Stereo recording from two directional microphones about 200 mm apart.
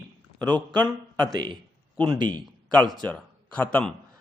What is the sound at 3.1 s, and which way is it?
Speech, 5° left (ahead or behind).